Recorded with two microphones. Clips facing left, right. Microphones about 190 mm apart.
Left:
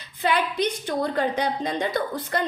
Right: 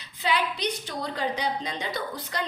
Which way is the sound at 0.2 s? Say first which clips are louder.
Left 4 dB; 50° left (ahead or behind).